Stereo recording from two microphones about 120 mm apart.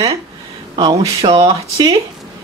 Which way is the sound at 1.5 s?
35° right (ahead or behind).